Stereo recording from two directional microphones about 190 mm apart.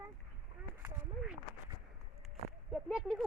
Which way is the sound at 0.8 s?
10° right (ahead or behind).